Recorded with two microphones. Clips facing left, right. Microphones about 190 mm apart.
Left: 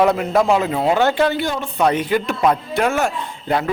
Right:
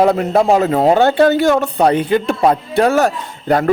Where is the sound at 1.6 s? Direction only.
35° right (ahead or behind).